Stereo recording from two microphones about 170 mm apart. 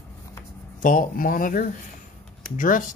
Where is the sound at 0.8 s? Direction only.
55° left (ahead or behind).